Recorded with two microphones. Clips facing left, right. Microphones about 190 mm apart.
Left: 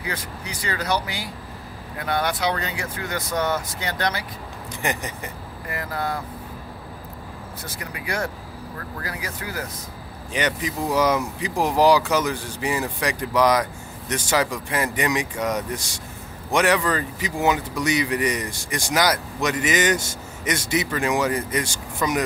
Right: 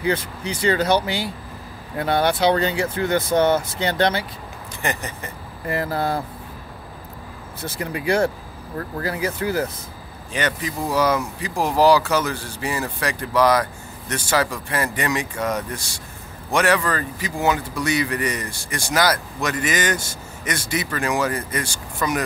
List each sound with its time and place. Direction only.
0.0 s speech: 25° right (ahead or behind)
4.8 s speech: 15° left (ahead or behind)
5.7 s speech: 30° right (ahead or behind)
7.6 s speech: 30° right (ahead or behind)
10.3 s speech: 15° left (ahead or behind)